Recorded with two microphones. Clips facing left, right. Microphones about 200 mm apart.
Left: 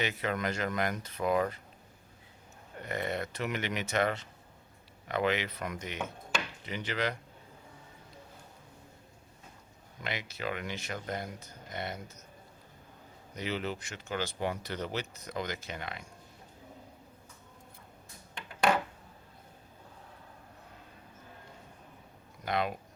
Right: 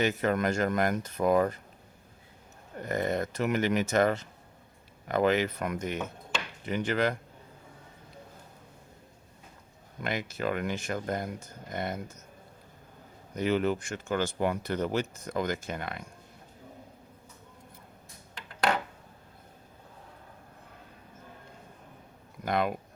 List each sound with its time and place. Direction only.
0.0 s speech: 45° right (ahead or behind)
2.7 s speech: 45° right (ahead or behind)
10.0 s speech: 50° right (ahead or behind)
13.3 s speech: 50° right (ahead or behind)
22.4 s speech: 50° right (ahead or behind)